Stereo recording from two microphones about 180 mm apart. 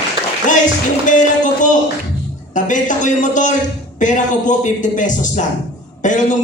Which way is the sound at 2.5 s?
45° left (ahead or behind).